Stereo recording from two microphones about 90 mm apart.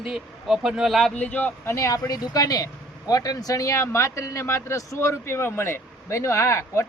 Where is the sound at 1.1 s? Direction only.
15° left (ahead or behind).